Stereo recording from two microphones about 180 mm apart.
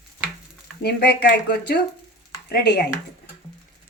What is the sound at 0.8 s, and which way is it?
Speech, 65° left (ahead or behind).